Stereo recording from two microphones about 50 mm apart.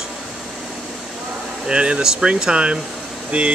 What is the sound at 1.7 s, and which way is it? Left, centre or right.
Speech, centre.